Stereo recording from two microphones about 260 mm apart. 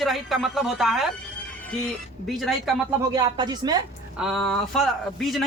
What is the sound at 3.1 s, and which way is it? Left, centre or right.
Speech, centre.